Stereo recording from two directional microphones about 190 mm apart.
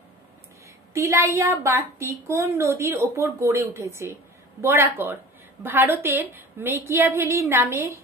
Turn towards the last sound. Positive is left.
turn(degrees=-15)  # may be behind; listen again after turning